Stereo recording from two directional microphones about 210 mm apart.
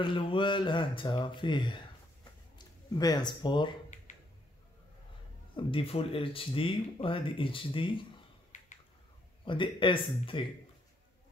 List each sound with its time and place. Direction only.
0.0 s speech: 25° left (ahead or behind)
3.0 s speech: 20° left (ahead or behind)
5.6 s speech: 25° left (ahead or behind)
9.4 s speech: 25° left (ahead or behind)